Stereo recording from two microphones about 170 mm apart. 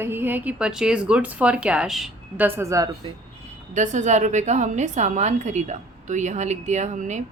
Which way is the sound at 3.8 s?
45° right (ahead or behind).